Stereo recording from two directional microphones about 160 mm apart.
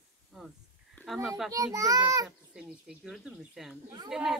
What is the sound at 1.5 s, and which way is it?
Speech, 20° right (ahead or behind).